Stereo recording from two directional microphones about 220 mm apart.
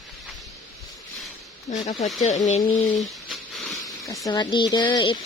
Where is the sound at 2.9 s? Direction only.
Centre (ahead or behind).